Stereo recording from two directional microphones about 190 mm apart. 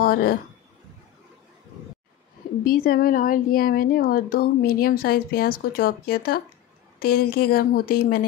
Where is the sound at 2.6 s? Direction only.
50° left (ahead or behind).